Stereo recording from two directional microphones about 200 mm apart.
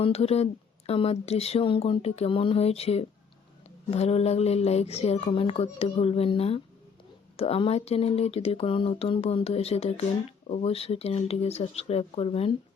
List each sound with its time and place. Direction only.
0.0 s speech: 30° left (ahead or behind)